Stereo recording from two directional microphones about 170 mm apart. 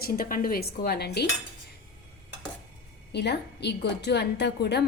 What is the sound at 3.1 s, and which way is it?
A woman's voice, 80° left.